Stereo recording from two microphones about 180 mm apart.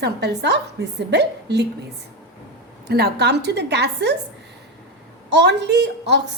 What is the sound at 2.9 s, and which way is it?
A woman's voice, 65° right (ahead or behind).